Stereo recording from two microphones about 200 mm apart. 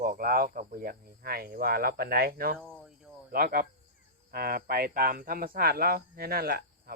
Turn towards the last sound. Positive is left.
turn(degrees=-50)  # may be behind; listen again after turning